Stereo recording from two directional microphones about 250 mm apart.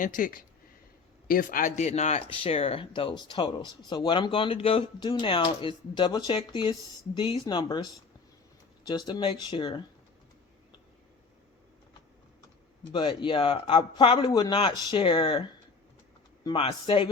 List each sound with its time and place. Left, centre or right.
0.0 s speech: left; by 7.9 s centre
8.9 s speech: centre
12.9 s speech: centre